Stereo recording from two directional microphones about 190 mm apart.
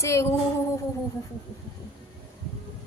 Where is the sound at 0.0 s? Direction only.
15° left (ahead or behind).